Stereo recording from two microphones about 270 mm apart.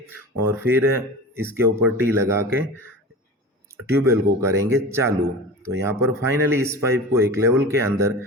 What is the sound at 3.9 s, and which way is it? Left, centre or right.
Speech, centre.